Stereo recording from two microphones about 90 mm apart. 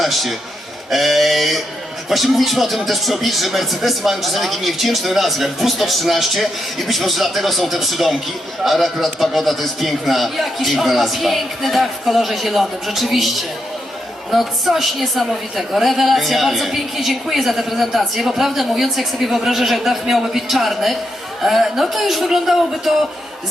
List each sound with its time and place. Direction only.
0.0 s a woman's voice: centre (ahead or behind)